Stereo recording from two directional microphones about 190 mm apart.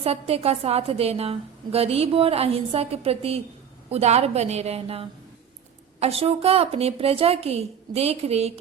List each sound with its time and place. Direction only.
0.0 s a woman's voice: 30° right (ahead or behind)